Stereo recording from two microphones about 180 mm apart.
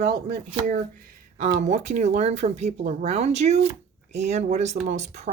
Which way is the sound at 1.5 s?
40° right (ahead or behind).